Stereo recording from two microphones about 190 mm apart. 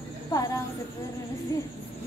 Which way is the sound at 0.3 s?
20° left (ahead or behind).